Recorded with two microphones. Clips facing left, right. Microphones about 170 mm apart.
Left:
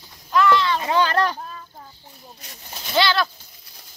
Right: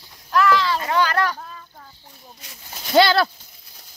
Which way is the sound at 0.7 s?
25° left (ahead or behind).